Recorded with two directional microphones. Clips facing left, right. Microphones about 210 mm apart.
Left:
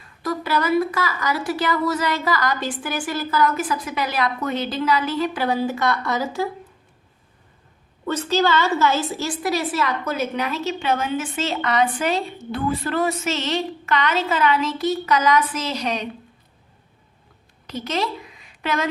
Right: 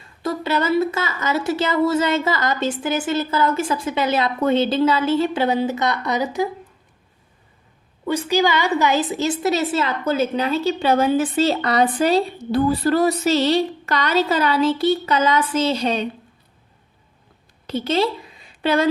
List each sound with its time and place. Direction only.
0.0 s a woman's voice: 25° right (ahead or behind)
8.0 s a woman's voice: 10° right (ahead or behind); by 16.0 s 30° right (ahead or behind)
17.7 s a woman's voice: 30° right (ahead or behind)